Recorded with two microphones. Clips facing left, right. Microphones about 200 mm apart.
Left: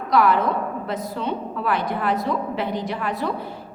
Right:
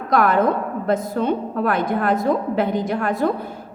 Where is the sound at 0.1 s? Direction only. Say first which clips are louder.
Right 2 dB; 50° right (ahead or behind).